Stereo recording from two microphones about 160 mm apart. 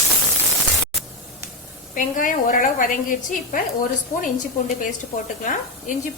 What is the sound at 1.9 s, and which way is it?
A woman's voice, 55° left (ahead or behind).